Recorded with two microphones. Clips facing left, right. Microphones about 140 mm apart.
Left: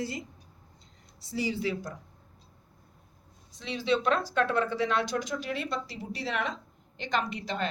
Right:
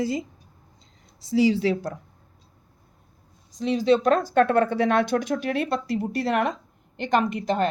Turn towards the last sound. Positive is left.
turn(degrees=-50)  # may be behind; listen again after turning